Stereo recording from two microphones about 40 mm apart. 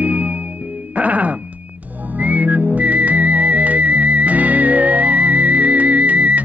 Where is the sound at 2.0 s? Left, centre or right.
Right.